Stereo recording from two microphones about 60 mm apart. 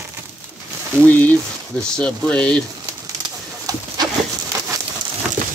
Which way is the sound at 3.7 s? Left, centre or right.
Right.